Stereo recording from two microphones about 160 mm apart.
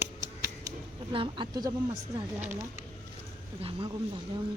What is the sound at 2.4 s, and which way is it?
Speech, 15° right (ahead or behind).